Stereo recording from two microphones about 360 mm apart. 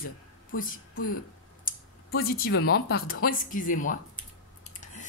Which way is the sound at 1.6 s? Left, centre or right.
Left.